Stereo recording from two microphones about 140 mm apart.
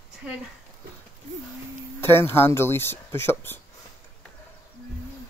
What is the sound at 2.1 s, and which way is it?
Speech, 15° left (ahead or behind).